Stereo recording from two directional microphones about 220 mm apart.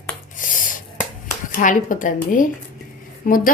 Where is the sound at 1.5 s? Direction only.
35° left (ahead or behind).